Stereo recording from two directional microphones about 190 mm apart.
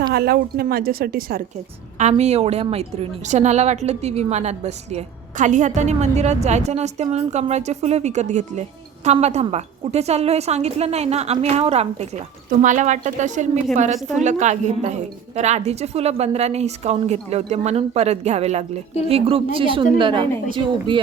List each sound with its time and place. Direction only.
0.1 s a woman's voice: 55° right (ahead or behind)
2.0 s a woman's voice: 35° right (ahead or behind)